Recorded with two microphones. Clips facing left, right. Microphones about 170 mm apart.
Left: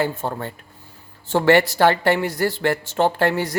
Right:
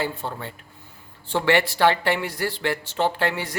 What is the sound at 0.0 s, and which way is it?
Speech, 45° left (ahead or behind).